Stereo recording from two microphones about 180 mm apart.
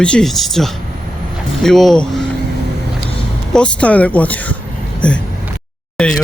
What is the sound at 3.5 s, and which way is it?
Speech, 5° left (ahead or behind).